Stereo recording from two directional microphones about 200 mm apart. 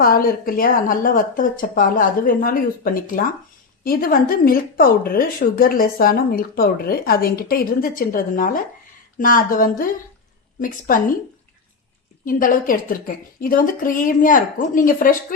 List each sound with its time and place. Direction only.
0.0 s speech: 45° left (ahead or behind)
12.2 s speech: 45° left (ahead or behind)